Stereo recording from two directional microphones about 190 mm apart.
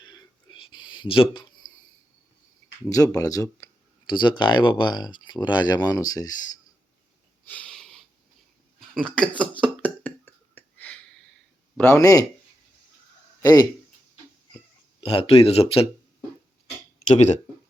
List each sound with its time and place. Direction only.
0.0 s a sound: 25° left (ahead or behind)
3.2 s speech: 20° left (ahead or behind)
7.5 s a sound: 5° left (ahead or behind)
9.0 s speech: 5° left (ahead or behind)
9.4 s a sound: 5° left (ahead or behind)
11.8 s speech: 15° left (ahead or behind)
13.4 s speech: 20° left (ahead or behind)
15.1 s speech: 30° left (ahead or behind)
17.1 s speech: 35° left (ahead or behind)